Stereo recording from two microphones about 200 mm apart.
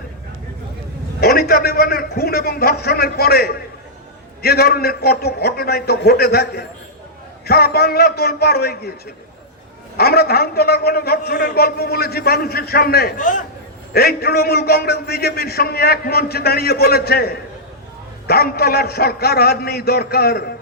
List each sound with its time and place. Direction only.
1.2 s a man's voice: 50° left (ahead or behind)
10.0 s a man's voice: 50° left (ahead or behind)
13.9 s a man's voice: 50° left (ahead or behind)